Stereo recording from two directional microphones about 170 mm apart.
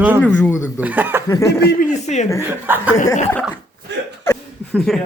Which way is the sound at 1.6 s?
75° left (ahead or behind).